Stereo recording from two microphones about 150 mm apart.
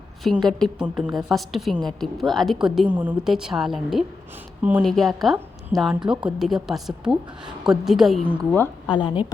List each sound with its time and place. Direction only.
0.4 s a woman's voice: centre (ahead or behind)
8.9 s a woman's voice: 30° left (ahead or behind)